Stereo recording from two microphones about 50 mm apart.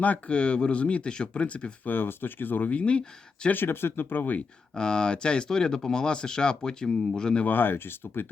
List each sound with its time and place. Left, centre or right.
0.0 s speech: left
1.9 s speech: left
3.5 s speech: left
4.7 s speech: centre
7.4 s speech: left